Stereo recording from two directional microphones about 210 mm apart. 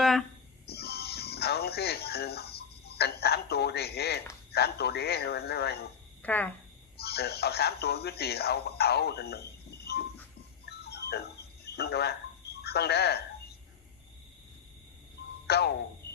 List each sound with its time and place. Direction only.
0.0 s a sound: centre (ahead or behind)
0.7 s music: 50° left (ahead or behind)
4.5 s a man's voice: 50° left (ahead or behind)
6.2 s speech: 10° left (ahead or behind)
6.9 s speech: 50° left (ahead or behind)
10.7 s music: 50° left (ahead or behind)
15.4 s speech: 50° left (ahead or behind)